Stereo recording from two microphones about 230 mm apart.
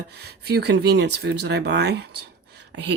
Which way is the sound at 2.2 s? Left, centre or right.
Right.